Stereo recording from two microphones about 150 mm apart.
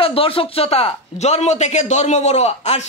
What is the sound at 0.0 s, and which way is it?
Speech, 40° left (ahead or behind).